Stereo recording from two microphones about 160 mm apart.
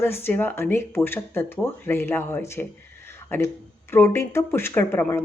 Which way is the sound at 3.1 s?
15° left (ahead or behind).